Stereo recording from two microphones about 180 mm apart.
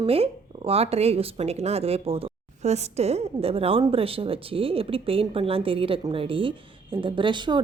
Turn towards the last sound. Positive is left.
turn(degrees=-25)  # may be behind; listen again after turning